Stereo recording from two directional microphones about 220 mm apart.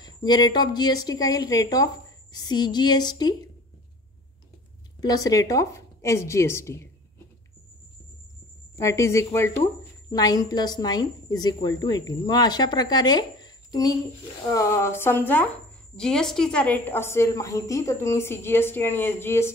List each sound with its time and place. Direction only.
0.0 s a woman's voice: 20° left (ahead or behind)
5.0 s a woman's voice: 15° left (ahead or behind)
8.7 s a woman's voice: 15° left (ahead or behind)